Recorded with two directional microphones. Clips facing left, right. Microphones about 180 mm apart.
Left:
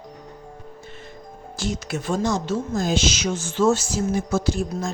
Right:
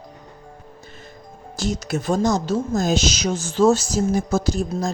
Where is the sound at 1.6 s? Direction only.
40° right (ahead or behind).